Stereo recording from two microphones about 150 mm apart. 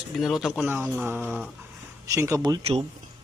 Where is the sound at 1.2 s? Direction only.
5° left (ahead or behind).